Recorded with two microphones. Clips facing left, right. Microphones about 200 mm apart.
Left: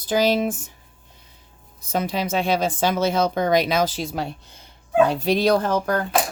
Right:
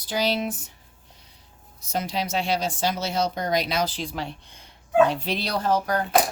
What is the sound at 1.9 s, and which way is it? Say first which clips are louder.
Speech: left 4 dB; 55° left (ahead or behind).